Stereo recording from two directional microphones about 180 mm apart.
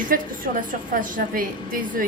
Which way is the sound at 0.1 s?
50° right (ahead or behind).